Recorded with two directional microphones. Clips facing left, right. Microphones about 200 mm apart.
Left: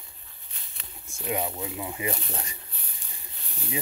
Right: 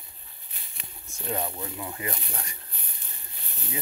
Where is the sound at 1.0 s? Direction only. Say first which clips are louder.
Left 2 dB; 10° left (ahead or behind).